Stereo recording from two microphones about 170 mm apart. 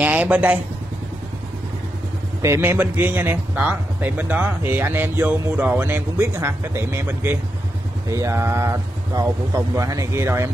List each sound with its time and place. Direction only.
0.0 s a man's voice: 10° right (ahead or behind)
2.4 s a man's voice: 15° right (ahead or behind)